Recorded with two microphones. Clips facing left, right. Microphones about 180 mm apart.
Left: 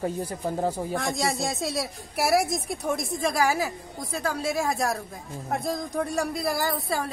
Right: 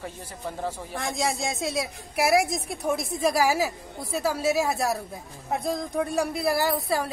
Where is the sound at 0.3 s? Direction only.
40° left (ahead or behind).